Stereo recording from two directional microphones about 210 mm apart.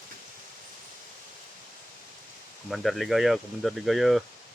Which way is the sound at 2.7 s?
Centre (ahead or behind).